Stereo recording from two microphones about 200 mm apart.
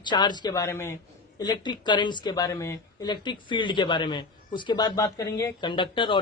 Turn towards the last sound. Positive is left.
turn(degrees=25)  # may be behind; listen again after turning